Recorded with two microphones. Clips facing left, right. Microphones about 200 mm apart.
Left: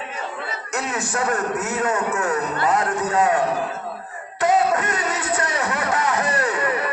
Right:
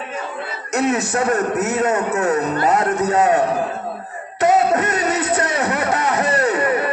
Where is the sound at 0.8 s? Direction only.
20° right (ahead or behind).